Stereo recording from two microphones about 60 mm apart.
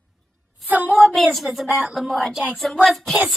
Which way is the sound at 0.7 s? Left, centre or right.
Right.